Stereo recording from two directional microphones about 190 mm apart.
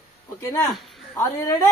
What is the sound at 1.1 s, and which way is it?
Speech, 15° left (ahead or behind).